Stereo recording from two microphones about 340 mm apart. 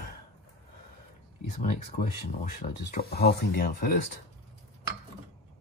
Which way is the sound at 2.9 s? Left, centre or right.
Left.